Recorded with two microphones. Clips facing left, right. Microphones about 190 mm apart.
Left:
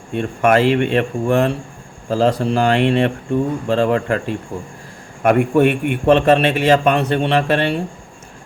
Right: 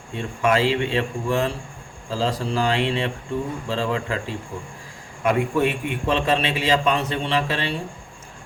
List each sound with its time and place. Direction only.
0.1 s a man's voice: 60° left (ahead or behind)